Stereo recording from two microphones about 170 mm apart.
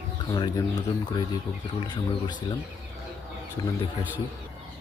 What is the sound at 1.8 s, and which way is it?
Speech, 25° left (ahead or behind).